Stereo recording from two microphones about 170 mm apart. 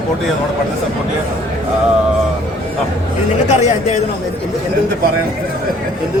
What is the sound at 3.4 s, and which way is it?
Speech, 45° left (ahead or behind).